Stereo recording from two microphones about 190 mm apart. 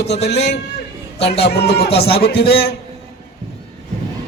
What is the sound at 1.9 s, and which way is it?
Speech, 30° left (ahead or behind).